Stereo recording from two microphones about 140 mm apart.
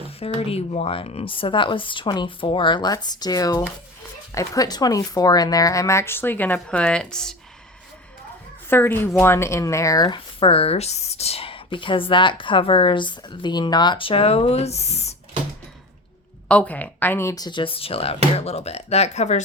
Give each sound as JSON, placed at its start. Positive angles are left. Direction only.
{"t": 0.0, "sound": "speech", "side_deg": 45}
{"t": 8.7, "sound": "speech", "side_deg": 15}
{"t": 10.4, "sound": "speech", "side_deg": 45}
{"t": 16.5, "sound": "speech", "side_deg": 10}